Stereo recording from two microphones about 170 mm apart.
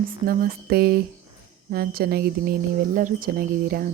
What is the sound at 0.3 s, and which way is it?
Speech, 60° right (ahead or behind).